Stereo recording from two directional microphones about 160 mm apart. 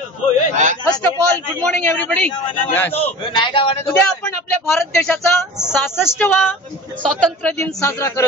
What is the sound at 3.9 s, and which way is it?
Speech, 15° left (ahead or behind).